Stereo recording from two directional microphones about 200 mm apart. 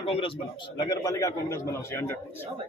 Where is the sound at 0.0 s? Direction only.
25° left (ahead or behind).